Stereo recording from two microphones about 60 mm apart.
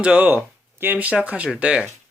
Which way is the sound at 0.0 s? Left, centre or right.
Centre.